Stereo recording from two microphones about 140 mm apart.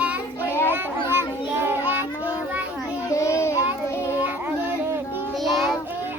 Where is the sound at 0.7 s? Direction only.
15° right (ahead or behind).